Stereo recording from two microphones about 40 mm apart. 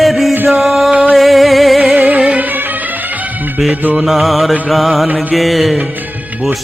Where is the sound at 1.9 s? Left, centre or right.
Right.